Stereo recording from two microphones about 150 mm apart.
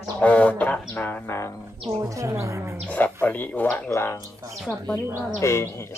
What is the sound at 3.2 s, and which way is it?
Speech, 10° left (ahead or behind).